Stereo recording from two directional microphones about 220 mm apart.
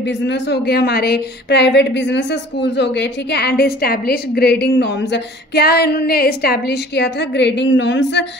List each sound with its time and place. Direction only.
0.0 s a woman's voice: 50° left (ahead or behind)